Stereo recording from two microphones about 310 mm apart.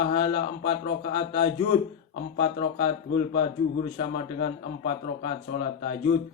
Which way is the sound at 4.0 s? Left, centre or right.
Left.